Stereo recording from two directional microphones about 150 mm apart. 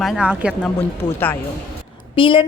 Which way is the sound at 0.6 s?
10° left (ahead or behind).